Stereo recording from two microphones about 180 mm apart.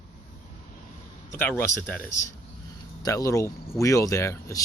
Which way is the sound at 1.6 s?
10° left (ahead or behind).